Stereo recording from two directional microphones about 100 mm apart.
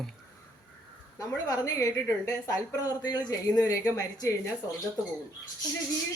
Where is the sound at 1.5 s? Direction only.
35° left (ahead or behind).